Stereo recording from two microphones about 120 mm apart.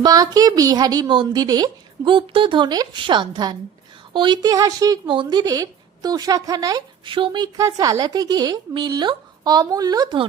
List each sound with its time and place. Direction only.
0.0 s a woman's voice: 35° right (ahead or behind)
5.0 s a woman's voice: 45° right (ahead or behind)
7.0 s speech: 45° right (ahead or behind)
7.4 s a woman's voice: 30° right (ahead or behind)